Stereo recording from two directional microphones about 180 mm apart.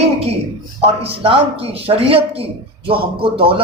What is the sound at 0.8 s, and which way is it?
A man's voice, 35° right (ahead or behind).